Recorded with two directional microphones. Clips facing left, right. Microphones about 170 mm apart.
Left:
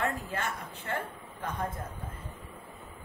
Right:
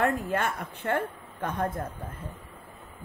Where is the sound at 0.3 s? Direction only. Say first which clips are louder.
Right 6 dB; 60° right (ahead or behind).